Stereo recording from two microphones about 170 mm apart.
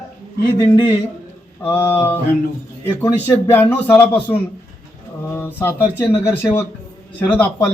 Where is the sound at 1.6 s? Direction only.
15° left (ahead or behind).